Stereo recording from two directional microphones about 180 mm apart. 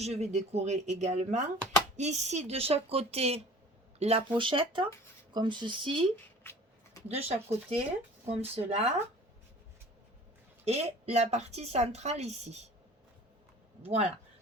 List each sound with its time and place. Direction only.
0.0 s a woman's voice: 35° right (ahead or behind)
6.1 s a sound: 15° left (ahead or behind)
7.1 s a woman's voice: 35° right (ahead or behind)
10.7 s a woman's voice: 35° right (ahead or behind)
13.8 s a woman's voice: 35° right (ahead or behind)